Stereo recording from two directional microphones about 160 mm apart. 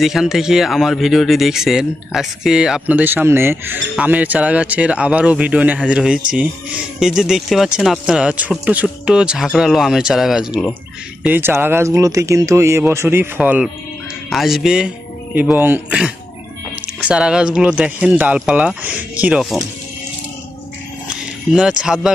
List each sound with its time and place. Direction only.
0.0 s speech: centre (ahead or behind)
21.5 s speech: 5° right (ahead or behind)